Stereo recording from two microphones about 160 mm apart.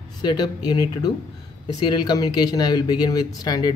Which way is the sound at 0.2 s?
25° left (ahead or behind).